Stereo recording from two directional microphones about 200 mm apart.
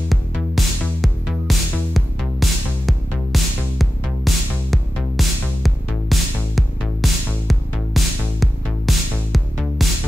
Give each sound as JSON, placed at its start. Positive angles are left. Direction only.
{"t": 0.1, "sound": "music", "side_deg": 0}